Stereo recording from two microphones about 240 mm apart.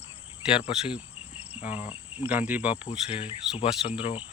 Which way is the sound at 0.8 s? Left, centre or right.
Centre.